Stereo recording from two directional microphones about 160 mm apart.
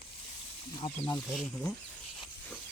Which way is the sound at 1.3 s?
Centre (ahead or behind).